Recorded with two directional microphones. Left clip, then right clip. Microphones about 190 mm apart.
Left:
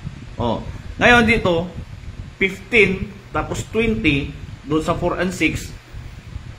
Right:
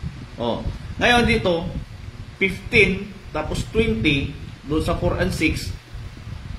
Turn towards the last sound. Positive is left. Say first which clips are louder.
# left 2 dB
turn(degrees=40)  # may be behind; listen again after turning